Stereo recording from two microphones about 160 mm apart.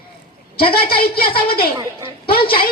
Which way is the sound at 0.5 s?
70° left (ahead or behind).